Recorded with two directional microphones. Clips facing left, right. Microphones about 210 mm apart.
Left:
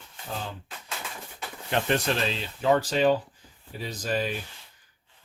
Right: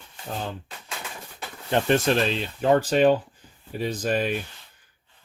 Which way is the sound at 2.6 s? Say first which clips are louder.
Right 3 dB; 50° right (ahead or behind).